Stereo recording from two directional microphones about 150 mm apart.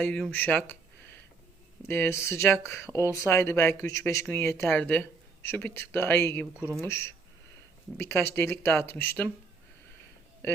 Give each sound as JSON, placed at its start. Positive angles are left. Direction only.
{"t": 0.0, "sound": "speech", "side_deg": 10}